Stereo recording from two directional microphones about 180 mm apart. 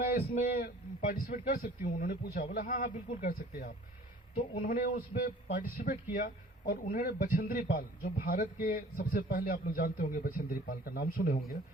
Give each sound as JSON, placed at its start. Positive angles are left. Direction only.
{"t": 0.1, "sound": "a man's voice", "side_deg": 60}